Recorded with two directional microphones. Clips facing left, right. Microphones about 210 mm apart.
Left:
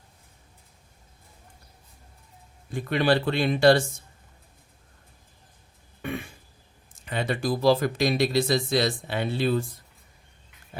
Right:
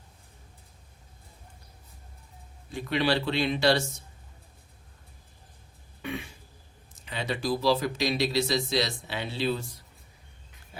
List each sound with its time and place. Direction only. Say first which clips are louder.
2.7 s speech: left 4 dB; 50° left (ahead or behind)
6.0 s a sound: left 3 dB; 50° left (ahead or behind)
6.9 s speech: left 4 dB; 50° left (ahead or behind)